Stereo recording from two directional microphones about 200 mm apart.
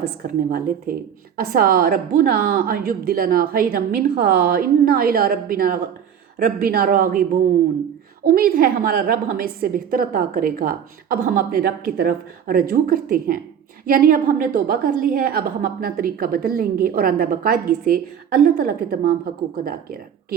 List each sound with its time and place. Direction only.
0.0 s a woman's voice: 45° right (ahead or behind)